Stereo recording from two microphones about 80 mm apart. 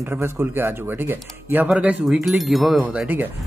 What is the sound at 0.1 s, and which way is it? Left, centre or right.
Speech, right.